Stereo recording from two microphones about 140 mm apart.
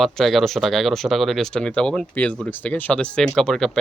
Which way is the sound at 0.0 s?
Centre (ahead or behind).